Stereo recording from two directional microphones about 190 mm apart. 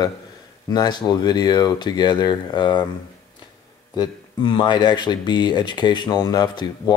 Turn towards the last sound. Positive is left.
turn(degrees=20)  # may be behind; listen again after turning